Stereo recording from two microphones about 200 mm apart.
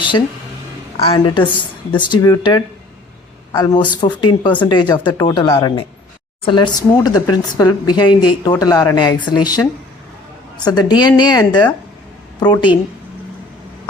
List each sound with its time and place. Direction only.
1.0 s speech: 25° left (ahead or behind)